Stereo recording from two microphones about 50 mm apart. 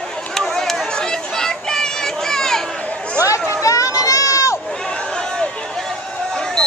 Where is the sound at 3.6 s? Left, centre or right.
Left.